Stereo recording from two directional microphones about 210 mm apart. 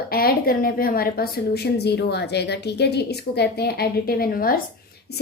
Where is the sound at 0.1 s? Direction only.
45° left (ahead or behind).